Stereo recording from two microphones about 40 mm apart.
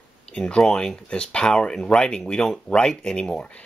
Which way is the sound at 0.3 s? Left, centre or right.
Left.